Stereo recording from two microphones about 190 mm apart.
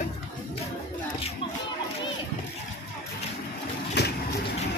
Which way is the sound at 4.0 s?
60° left (ahead or behind).